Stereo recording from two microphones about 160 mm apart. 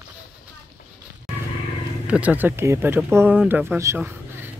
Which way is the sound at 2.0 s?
10° right (ahead or behind).